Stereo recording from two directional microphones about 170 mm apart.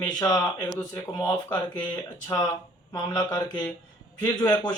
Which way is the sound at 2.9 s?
20° left (ahead or behind).